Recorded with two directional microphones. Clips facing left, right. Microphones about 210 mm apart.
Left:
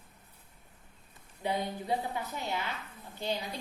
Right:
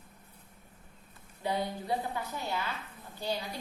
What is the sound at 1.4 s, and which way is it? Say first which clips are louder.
A woman's voice: even; 20° left (ahead or behind).